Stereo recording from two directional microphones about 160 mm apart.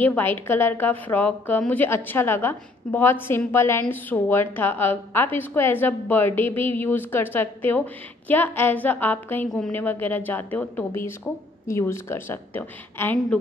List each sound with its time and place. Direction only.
0.0 s a woman's voice: 10° left (ahead or behind)